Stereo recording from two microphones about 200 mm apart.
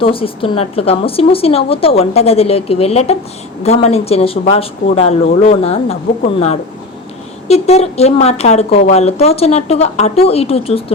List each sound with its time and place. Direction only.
0.0 s speech: 25° left (ahead or behind)